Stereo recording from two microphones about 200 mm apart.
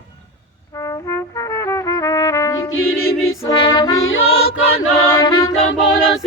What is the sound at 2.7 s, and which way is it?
Music, 90° left.